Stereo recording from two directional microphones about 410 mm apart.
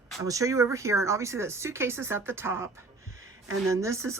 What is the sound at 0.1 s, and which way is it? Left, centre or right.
Speech, centre.